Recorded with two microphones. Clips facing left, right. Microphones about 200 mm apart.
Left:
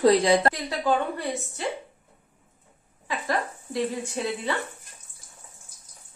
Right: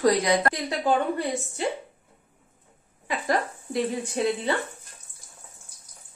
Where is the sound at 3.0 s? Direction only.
20° right (ahead or behind).